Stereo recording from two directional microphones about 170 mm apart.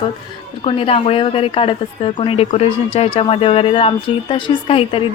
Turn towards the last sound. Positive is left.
turn(degrees=35)  # may be behind; listen again after turning